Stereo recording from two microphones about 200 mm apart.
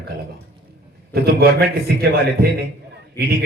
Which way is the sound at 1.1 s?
55° right (ahead or behind).